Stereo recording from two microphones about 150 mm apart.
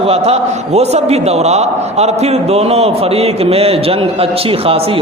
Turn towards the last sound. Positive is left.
turn(degrees=-40)  # may be behind; listen again after turning